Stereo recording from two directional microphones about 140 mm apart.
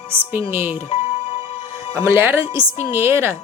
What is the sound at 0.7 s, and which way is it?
Music, 45° left (ahead or behind).